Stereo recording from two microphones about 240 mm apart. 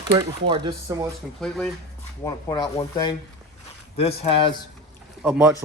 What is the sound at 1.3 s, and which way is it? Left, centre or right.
Speech, centre.